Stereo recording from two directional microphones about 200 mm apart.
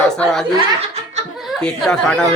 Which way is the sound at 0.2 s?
5° left (ahead or behind).